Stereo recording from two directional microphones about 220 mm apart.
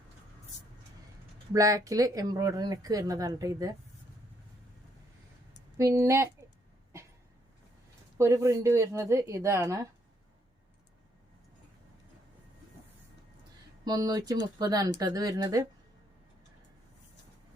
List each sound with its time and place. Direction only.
1.5 s speech: 15° right (ahead or behind)
5.7 s speech: 15° right (ahead or behind)
8.2 s speech: 15° right (ahead or behind)
13.8 s speech: 15° right (ahead or behind)